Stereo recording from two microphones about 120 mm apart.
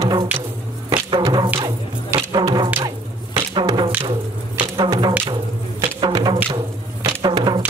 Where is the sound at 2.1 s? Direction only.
40° right (ahead or behind).